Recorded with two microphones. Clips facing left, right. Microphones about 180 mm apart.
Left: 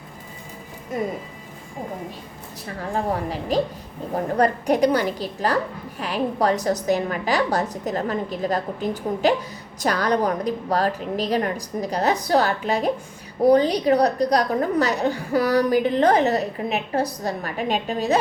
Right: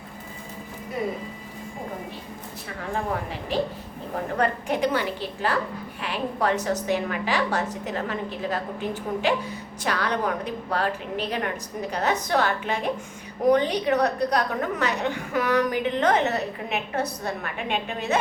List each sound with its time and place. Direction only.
2.9 s a woman's voice: 35° left (ahead or behind)